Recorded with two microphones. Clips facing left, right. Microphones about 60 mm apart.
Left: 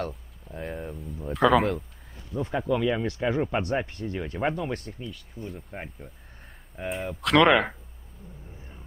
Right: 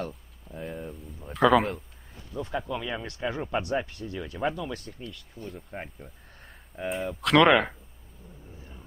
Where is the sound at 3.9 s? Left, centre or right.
Left.